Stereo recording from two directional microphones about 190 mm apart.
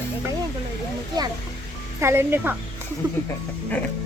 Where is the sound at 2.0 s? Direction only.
15° right (ahead or behind).